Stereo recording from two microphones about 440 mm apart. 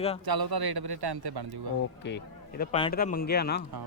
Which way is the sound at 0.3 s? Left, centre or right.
Right.